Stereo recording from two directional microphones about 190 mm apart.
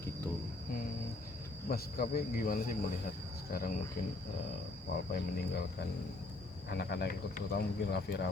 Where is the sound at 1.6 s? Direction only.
50° left (ahead or behind).